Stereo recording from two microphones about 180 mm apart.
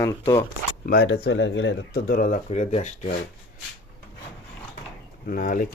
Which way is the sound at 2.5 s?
40° left (ahead or behind).